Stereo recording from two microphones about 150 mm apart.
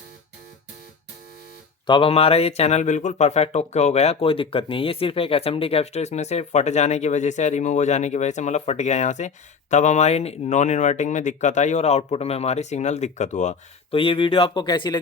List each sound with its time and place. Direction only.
1.9 s speech: 40° left (ahead or behind)
13.9 s speech: 35° left (ahead or behind)